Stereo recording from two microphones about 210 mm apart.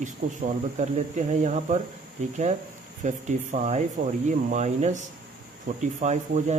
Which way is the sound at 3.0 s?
35° right (ahead or behind).